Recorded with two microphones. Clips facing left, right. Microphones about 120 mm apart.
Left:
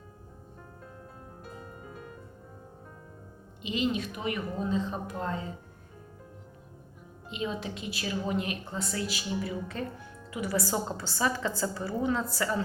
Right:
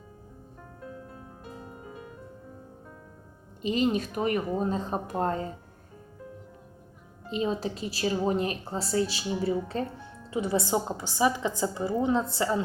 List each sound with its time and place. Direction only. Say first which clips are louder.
3.6 s a woman's voice: right 4 dB; 40° right (ahead or behind)
7.3 s a woman's voice: right 5 dB; 35° right (ahead or behind)